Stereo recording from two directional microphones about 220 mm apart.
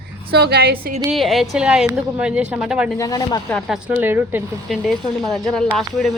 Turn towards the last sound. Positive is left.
turn(degrees=0)  # may be behind; listen again after turning